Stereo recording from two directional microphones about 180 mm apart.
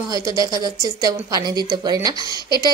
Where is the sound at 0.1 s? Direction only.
20° right (ahead or behind).